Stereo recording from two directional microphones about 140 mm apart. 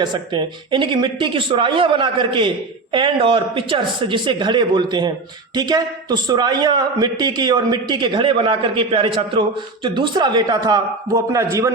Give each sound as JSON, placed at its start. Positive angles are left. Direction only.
{"t": 0.0, "sound": "a man's voice", "side_deg": -35}